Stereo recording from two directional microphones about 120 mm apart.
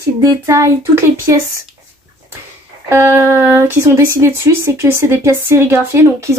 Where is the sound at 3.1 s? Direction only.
20° right (ahead or behind).